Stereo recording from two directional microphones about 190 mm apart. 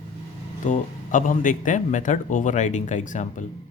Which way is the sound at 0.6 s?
45° left (ahead or behind).